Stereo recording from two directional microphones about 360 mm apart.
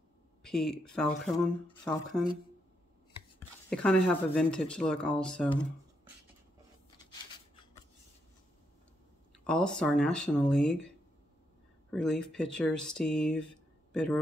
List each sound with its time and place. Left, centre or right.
0.4 s speech: centre
3.7 s speech: centre
7.1 s a sound: centre
9.4 s speech: centre
11.9 s speech: centre